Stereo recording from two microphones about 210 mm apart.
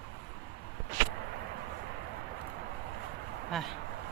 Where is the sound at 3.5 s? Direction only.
Centre (ahead or behind).